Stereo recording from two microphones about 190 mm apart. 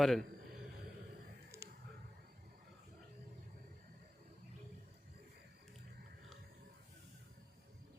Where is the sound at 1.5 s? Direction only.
15° right (ahead or behind).